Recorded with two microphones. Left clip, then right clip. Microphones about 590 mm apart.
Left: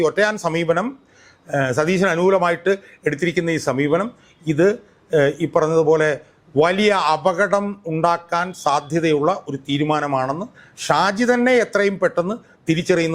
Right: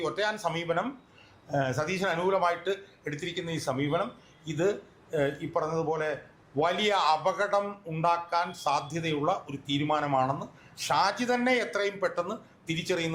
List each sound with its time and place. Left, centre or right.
0.0 s speech: left